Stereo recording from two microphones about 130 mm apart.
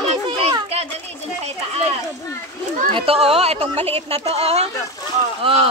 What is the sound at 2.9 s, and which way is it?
A woman's voice, 50° right (ahead or behind).